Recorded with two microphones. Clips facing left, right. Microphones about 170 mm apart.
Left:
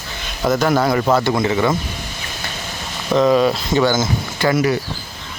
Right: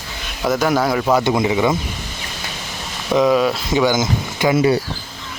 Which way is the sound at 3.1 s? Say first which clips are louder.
Left 1 dB; 5° right (ahead or behind).